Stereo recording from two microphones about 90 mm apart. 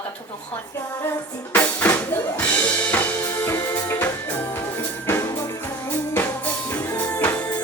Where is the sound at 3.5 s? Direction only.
35° left (ahead or behind).